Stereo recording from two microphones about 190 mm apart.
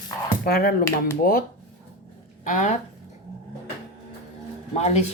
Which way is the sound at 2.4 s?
40° left (ahead or behind).